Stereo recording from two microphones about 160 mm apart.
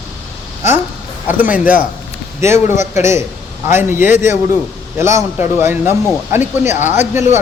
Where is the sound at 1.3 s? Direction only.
10° right (ahead or behind).